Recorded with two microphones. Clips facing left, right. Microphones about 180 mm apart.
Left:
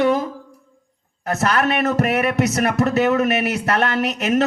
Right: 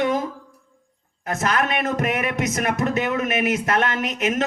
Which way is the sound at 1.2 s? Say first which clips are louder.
Left 3 dB; 35° left (ahead or behind).